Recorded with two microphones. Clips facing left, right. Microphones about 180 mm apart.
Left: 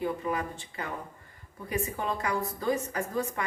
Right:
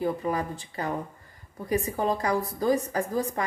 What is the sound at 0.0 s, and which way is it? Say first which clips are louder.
A woman's voice: right 3 dB; 35° right (ahead or behind).